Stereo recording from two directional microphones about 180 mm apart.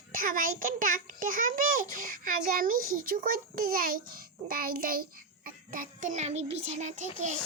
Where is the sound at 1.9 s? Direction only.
50° right (ahead or behind).